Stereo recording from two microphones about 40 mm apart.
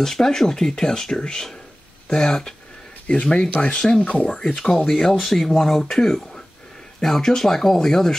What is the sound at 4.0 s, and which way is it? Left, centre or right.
Speech, left.